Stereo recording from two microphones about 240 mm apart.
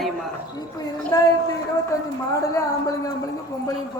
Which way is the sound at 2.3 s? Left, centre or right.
Centre.